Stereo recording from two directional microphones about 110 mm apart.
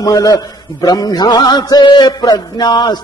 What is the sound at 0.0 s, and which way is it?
A man's voice, 30° left (ahead or behind).